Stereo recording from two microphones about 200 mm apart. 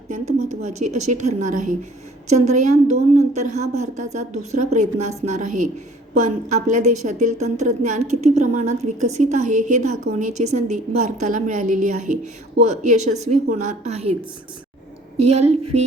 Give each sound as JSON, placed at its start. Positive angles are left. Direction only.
{"t": 0.1, "sound": "a woman's voice", "side_deg": -35}
{"t": 15.2, "sound": "a woman's voice", "side_deg": -30}